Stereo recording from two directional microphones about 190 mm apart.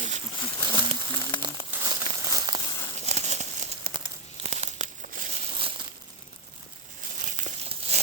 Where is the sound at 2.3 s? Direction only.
20° right (ahead or behind).